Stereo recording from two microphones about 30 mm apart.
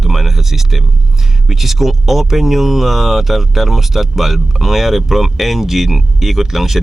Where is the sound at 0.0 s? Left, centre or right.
Centre.